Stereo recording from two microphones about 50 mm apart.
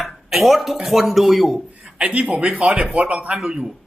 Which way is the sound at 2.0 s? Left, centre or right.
Right.